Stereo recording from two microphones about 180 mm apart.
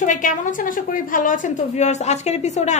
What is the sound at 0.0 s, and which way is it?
A woman's voice, 45° left (ahead or behind).